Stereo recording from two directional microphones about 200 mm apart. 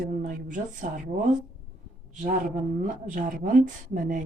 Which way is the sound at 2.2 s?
40° right (ahead or behind).